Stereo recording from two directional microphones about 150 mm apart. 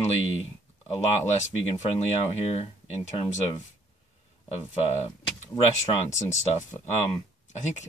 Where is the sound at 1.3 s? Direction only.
50° left (ahead or behind).